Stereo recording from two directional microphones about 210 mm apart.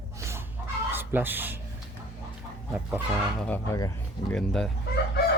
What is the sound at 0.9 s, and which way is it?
Speech, 10° right (ahead or behind).